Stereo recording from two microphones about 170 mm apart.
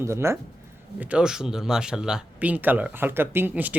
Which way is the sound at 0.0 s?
15° right (ahead or behind).